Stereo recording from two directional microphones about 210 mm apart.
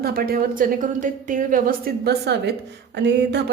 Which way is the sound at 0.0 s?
45° right (ahead or behind).